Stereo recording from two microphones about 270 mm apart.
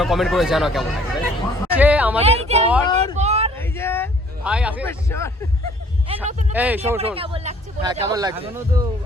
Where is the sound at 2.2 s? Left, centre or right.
Right.